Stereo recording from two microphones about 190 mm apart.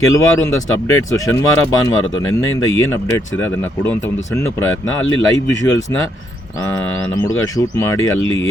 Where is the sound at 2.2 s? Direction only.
90° left.